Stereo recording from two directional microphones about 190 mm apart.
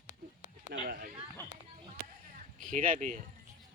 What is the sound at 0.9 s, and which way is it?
Speech, 50° right (ahead or behind).